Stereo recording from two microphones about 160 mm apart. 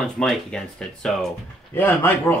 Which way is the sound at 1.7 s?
15° left (ahead or behind).